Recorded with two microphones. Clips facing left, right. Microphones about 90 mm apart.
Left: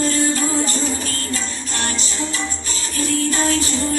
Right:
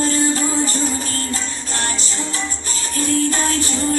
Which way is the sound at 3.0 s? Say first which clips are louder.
Right 1 dB; 35° right (ahead or behind).